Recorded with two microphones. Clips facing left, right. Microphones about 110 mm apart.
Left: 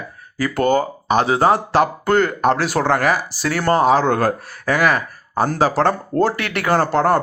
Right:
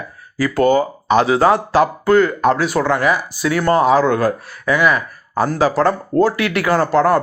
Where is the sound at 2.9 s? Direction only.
60° left (ahead or behind).